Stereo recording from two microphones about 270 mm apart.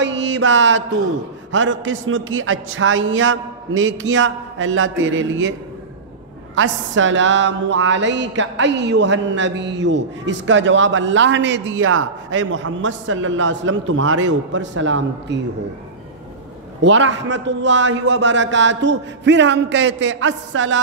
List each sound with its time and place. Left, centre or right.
0.0 s mantra: right
1.5 s speech: right
6.5 s speech: right
16.8 s speech: right